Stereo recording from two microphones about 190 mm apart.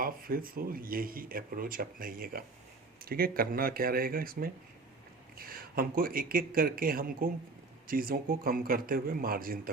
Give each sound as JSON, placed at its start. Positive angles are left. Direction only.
{"t": 0.0, "sound": "speech", "side_deg": -50}